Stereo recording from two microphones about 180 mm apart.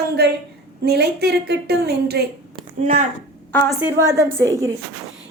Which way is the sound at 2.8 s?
50° right (ahead or behind).